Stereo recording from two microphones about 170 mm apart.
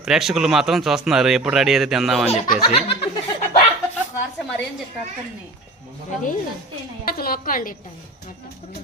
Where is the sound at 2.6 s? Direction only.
30° left (ahead or behind).